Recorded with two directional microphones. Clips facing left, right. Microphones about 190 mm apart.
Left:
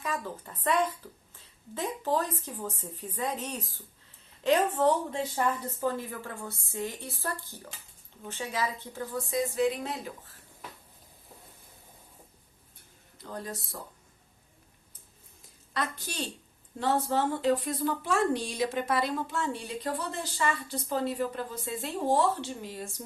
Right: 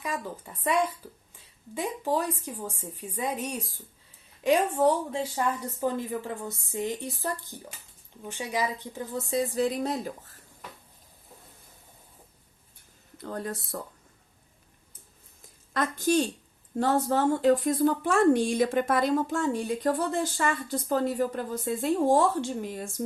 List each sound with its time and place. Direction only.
0.0 s speech: 10° right (ahead or behind)
9.3 s speech: 35° right (ahead or behind)
13.3 s speech: 55° right (ahead or behind)
15.7 s a woman's voice: 45° right (ahead or behind)